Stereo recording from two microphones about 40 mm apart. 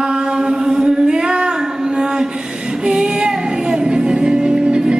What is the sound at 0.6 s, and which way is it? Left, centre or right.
Singing, centre.